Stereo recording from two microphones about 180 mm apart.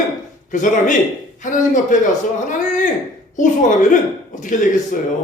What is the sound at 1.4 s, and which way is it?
Speech, 45° left (ahead or behind).